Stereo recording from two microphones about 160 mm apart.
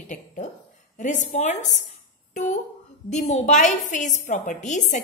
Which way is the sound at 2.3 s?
50° left (ahead or behind).